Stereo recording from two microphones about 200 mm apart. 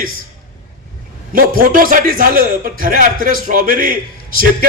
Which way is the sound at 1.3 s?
45° right (ahead or behind).